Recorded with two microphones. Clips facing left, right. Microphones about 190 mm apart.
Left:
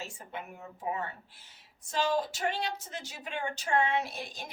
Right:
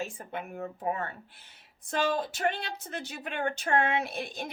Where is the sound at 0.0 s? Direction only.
55° right (ahead or behind).